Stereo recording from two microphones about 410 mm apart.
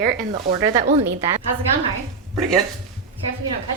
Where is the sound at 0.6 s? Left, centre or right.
Centre.